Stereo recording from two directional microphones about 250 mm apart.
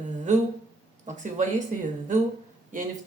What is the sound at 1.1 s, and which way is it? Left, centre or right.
Speech, right.